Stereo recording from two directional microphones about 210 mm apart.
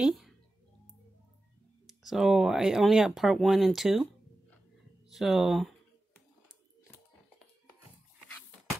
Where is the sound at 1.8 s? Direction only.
Centre (ahead or behind).